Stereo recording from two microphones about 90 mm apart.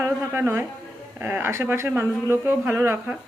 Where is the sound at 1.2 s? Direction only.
20° right (ahead or behind).